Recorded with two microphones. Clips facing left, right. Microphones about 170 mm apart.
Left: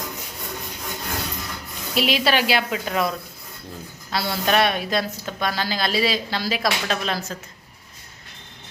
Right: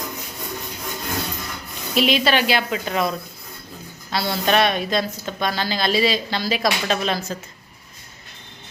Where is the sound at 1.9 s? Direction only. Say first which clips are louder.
Right 2 dB; 5° left (ahead or behind).